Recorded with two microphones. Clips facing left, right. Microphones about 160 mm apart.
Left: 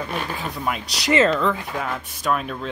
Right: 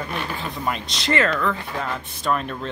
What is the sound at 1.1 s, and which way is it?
Speech, 20° left (ahead or behind).